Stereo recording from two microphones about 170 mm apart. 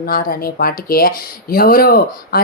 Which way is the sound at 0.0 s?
60° left (ahead or behind).